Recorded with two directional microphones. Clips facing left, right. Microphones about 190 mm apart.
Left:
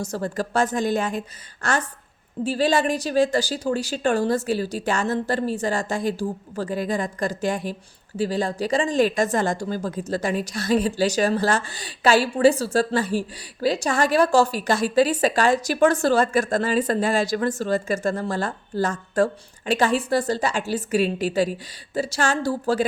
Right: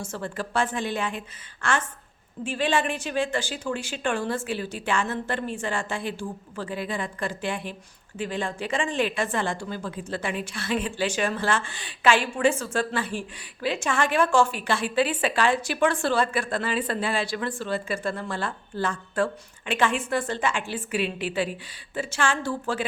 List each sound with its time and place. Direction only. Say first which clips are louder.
0.0 s speech: left 6 dB; 40° left (ahead or behind)